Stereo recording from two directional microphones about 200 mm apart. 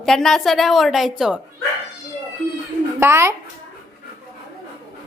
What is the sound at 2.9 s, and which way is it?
Speech, 15° right (ahead or behind).